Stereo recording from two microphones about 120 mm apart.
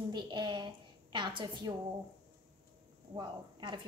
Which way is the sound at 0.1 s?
40° right (ahead or behind).